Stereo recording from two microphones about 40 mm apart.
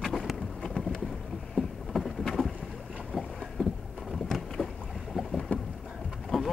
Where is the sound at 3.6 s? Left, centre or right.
Left.